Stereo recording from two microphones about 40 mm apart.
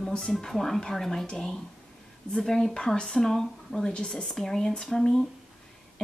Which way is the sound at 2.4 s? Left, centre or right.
Centre.